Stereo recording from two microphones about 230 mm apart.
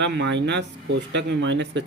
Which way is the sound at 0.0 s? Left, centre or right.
Right.